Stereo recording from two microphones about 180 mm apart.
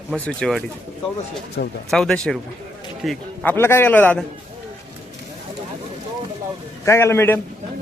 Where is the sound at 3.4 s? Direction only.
10° left (ahead or behind).